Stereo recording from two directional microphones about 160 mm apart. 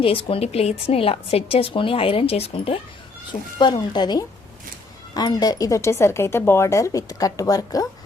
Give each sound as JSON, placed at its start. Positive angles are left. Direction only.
{"t": 0.0, "sound": "a woman's voice", "side_deg": 35}
{"t": 3.6, "sound": "speech", "side_deg": 25}